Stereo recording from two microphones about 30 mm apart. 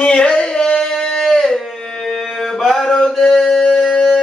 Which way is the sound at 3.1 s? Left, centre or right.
Centre.